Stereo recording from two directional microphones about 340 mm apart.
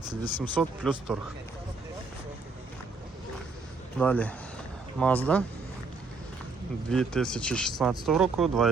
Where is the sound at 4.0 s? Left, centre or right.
Centre.